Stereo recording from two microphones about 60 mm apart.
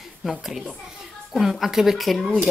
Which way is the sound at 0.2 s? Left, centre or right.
Centre.